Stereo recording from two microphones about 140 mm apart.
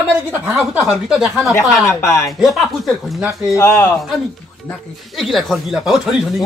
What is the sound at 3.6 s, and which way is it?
Speech, 20° left (ahead or behind).